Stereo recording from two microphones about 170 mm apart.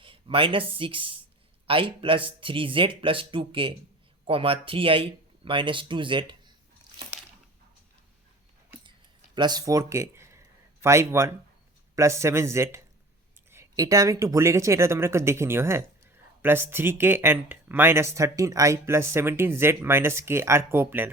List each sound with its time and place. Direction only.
0.0 s speech: 30° right (ahead or behind)
9.3 s speech: 25° right (ahead or behind)